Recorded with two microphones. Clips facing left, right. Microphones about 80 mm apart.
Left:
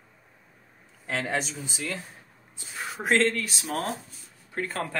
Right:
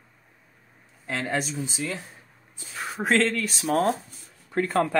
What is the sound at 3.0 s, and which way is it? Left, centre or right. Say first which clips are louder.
Speech: right 1 dB; centre.